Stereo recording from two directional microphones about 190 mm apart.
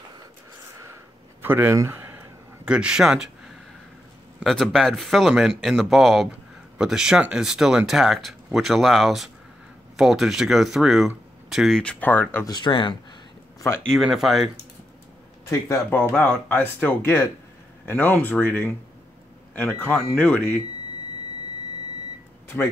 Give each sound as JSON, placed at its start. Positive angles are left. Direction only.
{"t": 1.4, "sound": "a sound", "side_deg": -10}
{"t": 4.4, "sound": "speech", "side_deg": 0}
{"t": 12.5, "sound": "speech", "side_deg": 25}
{"t": 13.8, "sound": "speech", "side_deg": 0}
{"t": 15.7, "sound": "speech", "side_deg": 10}